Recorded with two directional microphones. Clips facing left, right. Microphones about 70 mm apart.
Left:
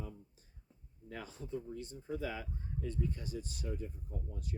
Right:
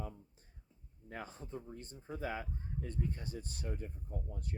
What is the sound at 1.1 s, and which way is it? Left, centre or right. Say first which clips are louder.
Speech: left 2 dB; right.